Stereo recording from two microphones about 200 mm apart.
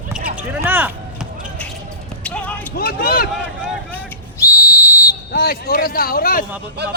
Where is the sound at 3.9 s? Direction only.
15° left (ahead or behind).